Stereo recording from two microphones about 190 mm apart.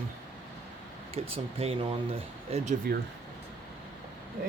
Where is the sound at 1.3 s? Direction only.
30° right (ahead or behind).